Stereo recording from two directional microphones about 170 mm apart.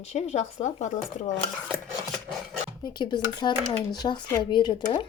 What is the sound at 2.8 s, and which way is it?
Speech, 25° left (ahead or behind).